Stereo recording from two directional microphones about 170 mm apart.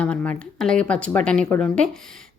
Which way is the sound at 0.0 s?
10° left (ahead or behind).